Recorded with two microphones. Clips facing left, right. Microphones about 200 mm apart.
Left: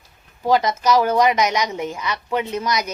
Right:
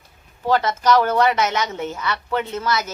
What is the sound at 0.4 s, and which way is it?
A woman's voice, 10° left (ahead or behind).